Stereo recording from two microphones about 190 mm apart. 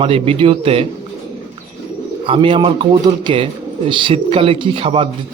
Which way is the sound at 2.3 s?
25° right (ahead or behind).